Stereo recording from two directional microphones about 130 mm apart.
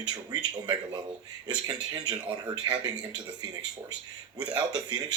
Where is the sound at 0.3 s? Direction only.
30° right (ahead or behind).